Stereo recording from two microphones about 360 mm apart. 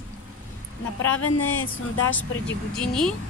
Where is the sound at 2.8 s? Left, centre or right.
Centre.